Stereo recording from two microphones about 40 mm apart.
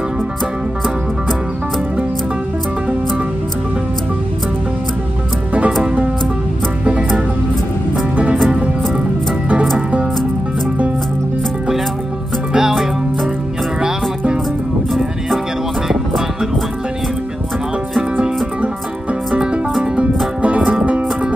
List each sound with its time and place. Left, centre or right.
6.8 s music: right
12.5 s music: centre
19.3 s music: right